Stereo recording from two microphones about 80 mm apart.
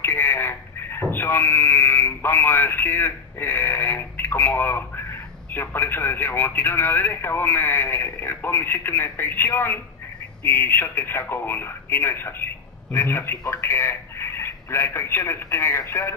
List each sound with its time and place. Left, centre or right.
0.0 s speech: left